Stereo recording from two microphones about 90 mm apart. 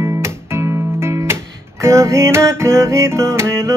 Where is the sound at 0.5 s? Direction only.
30° right (ahead or behind).